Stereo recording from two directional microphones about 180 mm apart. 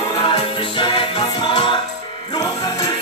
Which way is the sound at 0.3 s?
30° left (ahead or behind).